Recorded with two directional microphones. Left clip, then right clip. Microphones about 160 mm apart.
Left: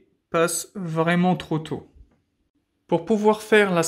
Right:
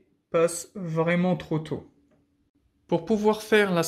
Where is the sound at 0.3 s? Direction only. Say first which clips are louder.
Left 1 dB; 35° left (ahead or behind).